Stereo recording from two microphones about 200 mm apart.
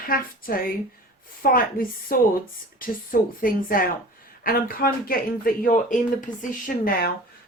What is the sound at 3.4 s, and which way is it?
Speech, 45° left (ahead or behind).